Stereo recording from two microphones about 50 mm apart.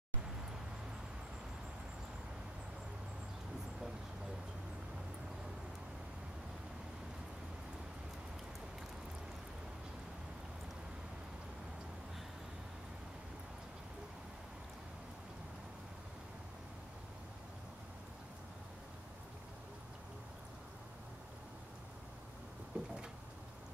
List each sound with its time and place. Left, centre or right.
22.7 s cupboard open or close: right